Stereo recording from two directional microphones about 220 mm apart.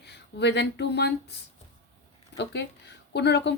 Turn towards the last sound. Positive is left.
turn(degrees=50)  # may be behind; listen again after turning